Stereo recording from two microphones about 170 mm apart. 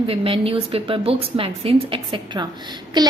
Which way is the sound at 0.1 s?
35° right (ahead or behind).